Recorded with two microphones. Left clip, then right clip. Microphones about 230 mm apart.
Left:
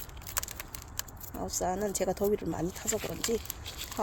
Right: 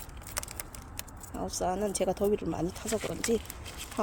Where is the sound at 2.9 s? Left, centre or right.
Right.